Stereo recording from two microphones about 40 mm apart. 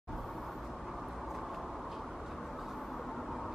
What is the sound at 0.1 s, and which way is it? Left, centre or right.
Vehicle, centre.